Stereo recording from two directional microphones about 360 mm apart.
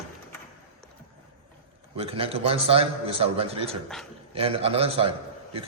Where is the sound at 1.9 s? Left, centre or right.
Centre.